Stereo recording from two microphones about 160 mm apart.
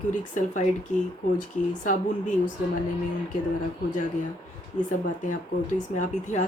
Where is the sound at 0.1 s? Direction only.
50° left (ahead or behind).